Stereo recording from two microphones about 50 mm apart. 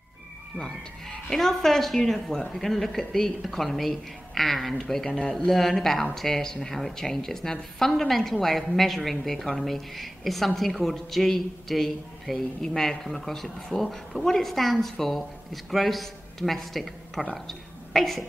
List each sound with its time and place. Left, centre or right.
0.6 s a woman's voice: centre